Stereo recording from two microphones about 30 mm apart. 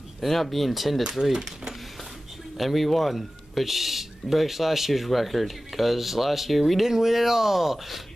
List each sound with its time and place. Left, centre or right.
0.2 s speech: centre
1.3 s speech: right
2.5 s speech: centre